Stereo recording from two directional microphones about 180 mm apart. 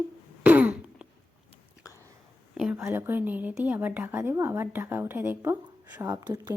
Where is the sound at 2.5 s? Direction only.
5° right (ahead or behind).